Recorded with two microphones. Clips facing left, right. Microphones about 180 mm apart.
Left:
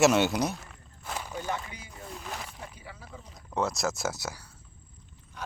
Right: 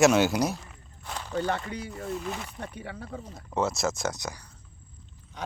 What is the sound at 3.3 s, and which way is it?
Speech, centre (ahead or behind).